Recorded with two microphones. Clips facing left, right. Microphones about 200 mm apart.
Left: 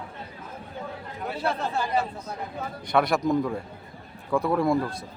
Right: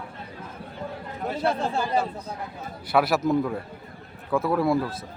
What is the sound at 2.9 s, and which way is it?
A man's voice, 5° right (ahead or behind).